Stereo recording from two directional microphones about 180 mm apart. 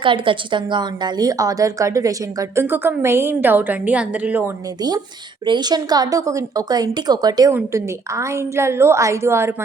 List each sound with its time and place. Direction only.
0.0 s a woman's voice: 30° right (ahead or behind); by 4.5 s 10° right (ahead or behind)
5.5 s a woman's voice: 25° right (ahead or behind)